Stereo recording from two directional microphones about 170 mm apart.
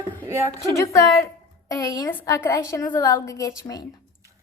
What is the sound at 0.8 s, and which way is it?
A woman's voice, 15° left (ahead or behind).